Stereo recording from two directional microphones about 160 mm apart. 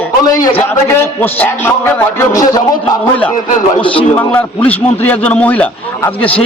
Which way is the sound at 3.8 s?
35° left (ahead or behind).